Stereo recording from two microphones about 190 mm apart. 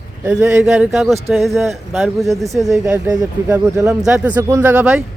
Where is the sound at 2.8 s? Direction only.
15° right (ahead or behind).